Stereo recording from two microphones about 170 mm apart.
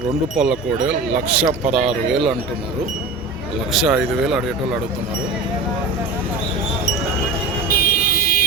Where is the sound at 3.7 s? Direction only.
Centre (ahead or behind).